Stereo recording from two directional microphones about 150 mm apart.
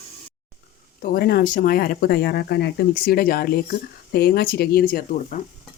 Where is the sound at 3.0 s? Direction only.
75° left (ahead or behind).